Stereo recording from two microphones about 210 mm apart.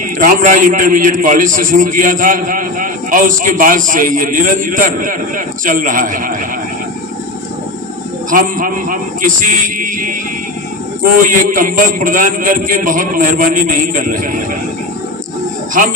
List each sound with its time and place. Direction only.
0.2 s a man's voice: 40° right (ahead or behind)
8.3 s a man's voice: 40° right (ahead or behind)